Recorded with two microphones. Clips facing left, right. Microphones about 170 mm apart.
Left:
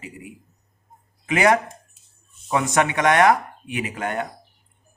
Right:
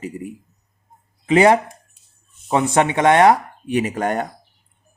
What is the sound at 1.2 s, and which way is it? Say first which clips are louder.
Speech: right 5 dB; 30° right (ahead or behind).